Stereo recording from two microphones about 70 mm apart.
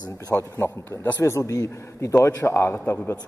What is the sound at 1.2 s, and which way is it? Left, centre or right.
A man's voice, left.